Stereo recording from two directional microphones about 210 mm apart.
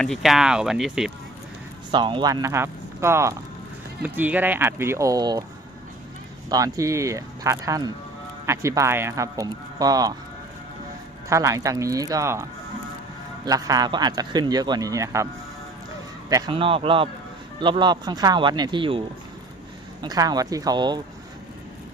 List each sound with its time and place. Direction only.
0.0 s speech: centre (ahead or behind)
1.9 s speech: 20° right (ahead or behind)
6.5 s speech: 15° right (ahead or behind)
11.3 s speech: 15° right (ahead or behind)
16.3 s speech: 25° right (ahead or behind)